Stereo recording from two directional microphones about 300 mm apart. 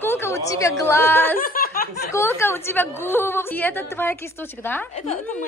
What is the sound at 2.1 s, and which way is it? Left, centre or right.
A woman's voice, centre.